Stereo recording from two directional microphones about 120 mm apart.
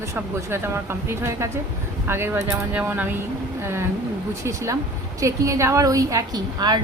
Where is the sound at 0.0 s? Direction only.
25° right (ahead or behind).